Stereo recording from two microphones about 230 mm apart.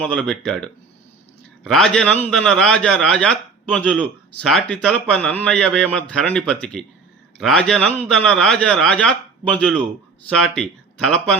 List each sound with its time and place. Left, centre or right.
0.0 s a man's voice: centre